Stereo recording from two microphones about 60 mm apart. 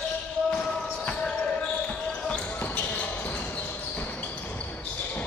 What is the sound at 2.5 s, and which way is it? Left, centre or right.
Basketball bounce, left.